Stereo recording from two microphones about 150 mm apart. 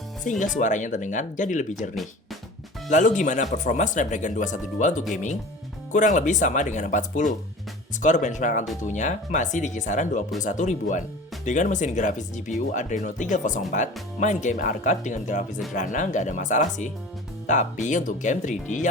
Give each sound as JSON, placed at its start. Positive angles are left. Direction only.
{"t": 0.3, "sound": "speech", "side_deg": 55}
{"t": 2.9, "sound": "speech", "side_deg": 55}